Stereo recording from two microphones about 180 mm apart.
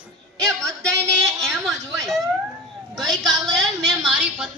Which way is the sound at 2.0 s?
Centre (ahead or behind).